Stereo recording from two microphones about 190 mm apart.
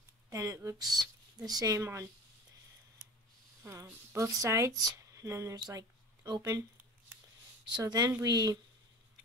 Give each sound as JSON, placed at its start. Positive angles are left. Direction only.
{"t": 0.3, "sound": "speech", "side_deg": -15}
{"t": 3.6, "sound": "speech", "side_deg": -15}
{"t": 7.6, "sound": "speech", "side_deg": -20}